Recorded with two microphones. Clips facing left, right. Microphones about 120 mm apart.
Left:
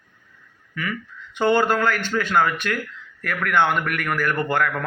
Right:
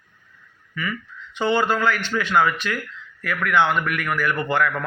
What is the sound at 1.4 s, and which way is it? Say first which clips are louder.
A man's voice: left 2 dB; 50° left (ahead or behind).